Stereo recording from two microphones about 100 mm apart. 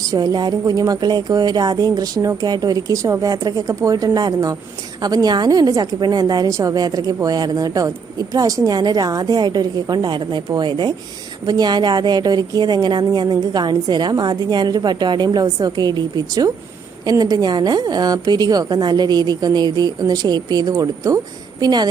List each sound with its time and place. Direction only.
0.1 s a woman's voice: 40° right (ahead or behind)